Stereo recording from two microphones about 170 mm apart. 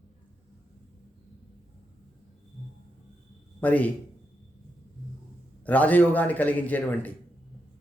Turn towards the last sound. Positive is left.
turn(degrees=10)  # may be behind; listen again after turning